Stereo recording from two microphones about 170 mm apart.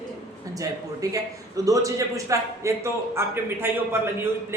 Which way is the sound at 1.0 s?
20° right (ahead or behind).